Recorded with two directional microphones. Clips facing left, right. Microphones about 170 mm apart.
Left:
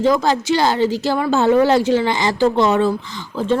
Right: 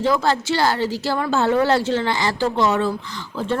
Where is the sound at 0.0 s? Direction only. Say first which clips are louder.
Left 3 dB; 15° left (ahead or behind).